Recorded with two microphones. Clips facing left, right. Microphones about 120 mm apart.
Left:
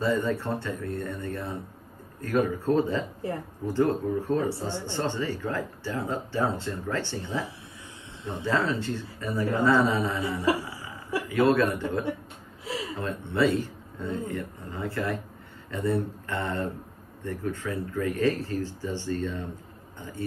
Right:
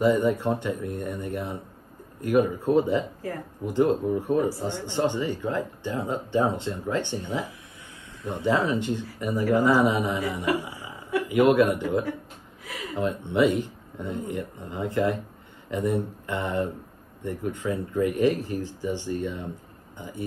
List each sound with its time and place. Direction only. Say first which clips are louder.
0.0 s speech: right 5 dB; 15° right (ahead or behind)
11.2 s speech: right 3 dB; 15° right (ahead or behind)
12.6 s a sound: left 4 dB; 30° left (ahead or behind)
12.9 s speech: right 8 dB; 15° right (ahead or behind)